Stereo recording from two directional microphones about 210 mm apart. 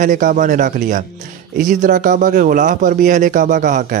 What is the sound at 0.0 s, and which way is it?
A man's voice, 40° right (ahead or behind).